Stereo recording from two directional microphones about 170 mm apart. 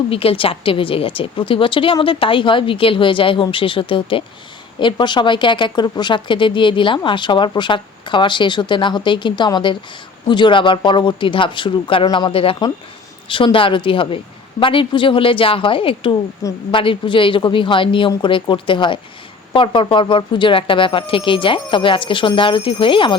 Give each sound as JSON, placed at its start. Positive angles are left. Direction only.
{"t": 0.1, "sound": "a woman's voice", "side_deg": 35}
{"t": 16.4, "sound": "speech", "side_deg": 20}
{"t": 16.7, "sound": "speech", "side_deg": 30}